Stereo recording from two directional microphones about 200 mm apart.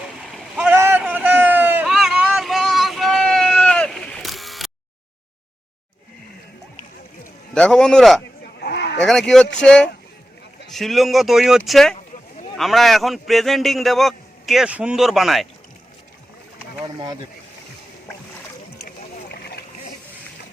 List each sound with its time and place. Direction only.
0.0 s vehicle: centre (ahead or behind)
7.5 s a man's voice: 5° left (ahead or behind)
8.6 s a sound: 55° left (ahead or behind)
9.0 s a man's voice: 5° left (ahead or behind)
18.9 s boat: 55° left (ahead or behind)